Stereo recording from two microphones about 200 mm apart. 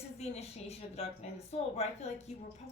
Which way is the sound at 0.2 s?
30° left (ahead or behind).